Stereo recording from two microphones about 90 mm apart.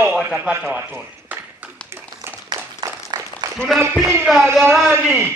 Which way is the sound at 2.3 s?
25° right (ahead or behind).